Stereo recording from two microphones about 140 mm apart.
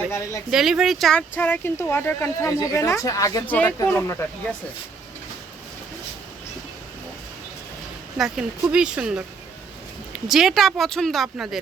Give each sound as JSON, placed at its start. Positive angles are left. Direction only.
{"t": 0.1, "sound": "speech", "side_deg": 20}
{"t": 0.5, "sound": "speech", "side_deg": -5}
{"t": 3.4, "sound": "speech", "side_deg": 10}
{"t": 8.2, "sound": "speech", "side_deg": -5}